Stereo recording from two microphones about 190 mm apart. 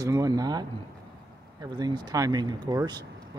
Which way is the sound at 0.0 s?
20° right (ahead or behind).